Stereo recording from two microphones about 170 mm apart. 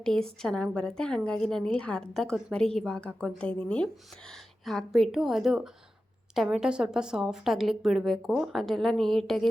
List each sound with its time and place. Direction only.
0.0 s a woman's voice: 5° left (ahead or behind)